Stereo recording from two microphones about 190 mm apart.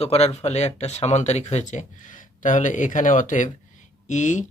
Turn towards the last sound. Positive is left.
turn(degrees=40)  # may be behind; listen again after turning